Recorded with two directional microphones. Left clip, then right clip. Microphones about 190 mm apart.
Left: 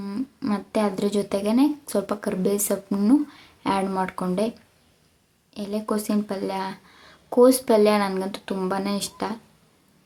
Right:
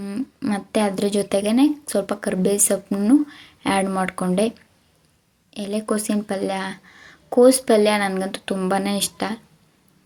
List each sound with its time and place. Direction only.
0.0 s speech: 5° right (ahead or behind)
5.5 s speech: 10° right (ahead or behind)